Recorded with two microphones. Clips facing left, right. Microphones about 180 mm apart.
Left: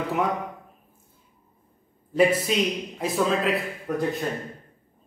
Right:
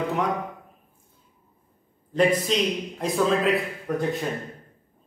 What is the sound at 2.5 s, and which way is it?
A man's voice, 5° left (ahead or behind).